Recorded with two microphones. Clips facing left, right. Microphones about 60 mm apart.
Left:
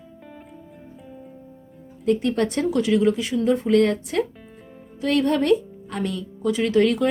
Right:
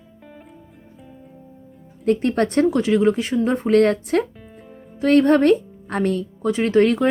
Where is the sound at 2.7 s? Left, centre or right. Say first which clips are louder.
Right 2 dB; right.